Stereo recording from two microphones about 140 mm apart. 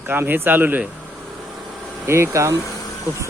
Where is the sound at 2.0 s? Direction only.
20° right (ahead or behind).